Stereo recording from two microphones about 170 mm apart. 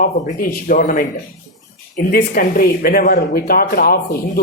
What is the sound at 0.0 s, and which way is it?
Speech, 55° left (ahead or behind).